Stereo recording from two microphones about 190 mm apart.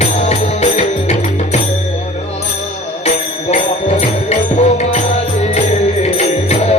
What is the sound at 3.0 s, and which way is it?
Music, 40° left (ahead or behind).